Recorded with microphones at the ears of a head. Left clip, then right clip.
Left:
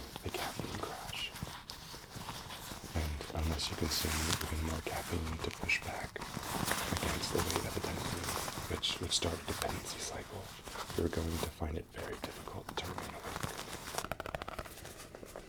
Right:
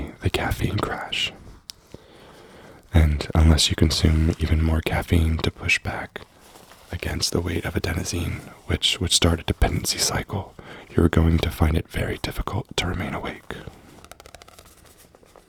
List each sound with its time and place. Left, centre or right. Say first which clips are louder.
0.0 s speech: right 14 dB; right
2.9 s speech: right 17 dB; right
6.5 s walk: left 11 dB; left
7.0 s speech: right 9 dB; right